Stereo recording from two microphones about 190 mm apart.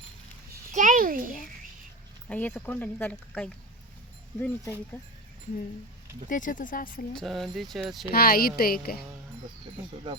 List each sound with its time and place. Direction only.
0.7 s a sound: 45° right (ahead or behind)
2.3 s speech: 10° left (ahead or behind)
6.2 s speech: 45° left (ahead or behind)
7.1 s speech: centre (ahead or behind)
8.1 s speech: 50° left (ahead or behind)